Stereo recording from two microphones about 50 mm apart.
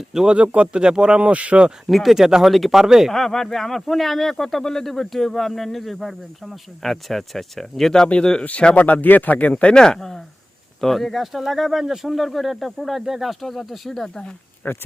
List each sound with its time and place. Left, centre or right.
0.3 s speech: right
1.9 s speech: centre
3.1 s speech: centre
8.0 s a man's voice: centre
14.6 s speech: left